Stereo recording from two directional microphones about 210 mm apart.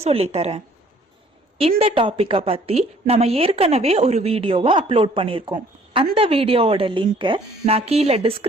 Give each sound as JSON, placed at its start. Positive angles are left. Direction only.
{"t": 0.0, "sound": "speech", "side_deg": -30}
{"t": 1.8, "sound": "a woman's voice", "side_deg": -25}